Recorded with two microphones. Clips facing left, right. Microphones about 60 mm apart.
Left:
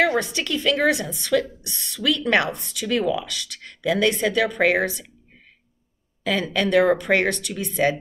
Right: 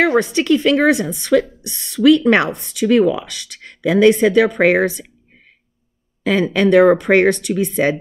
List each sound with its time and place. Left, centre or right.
0.0 s speech: right
6.2 s speech: right